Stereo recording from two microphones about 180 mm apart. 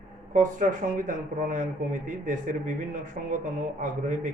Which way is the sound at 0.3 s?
45° right (ahead or behind).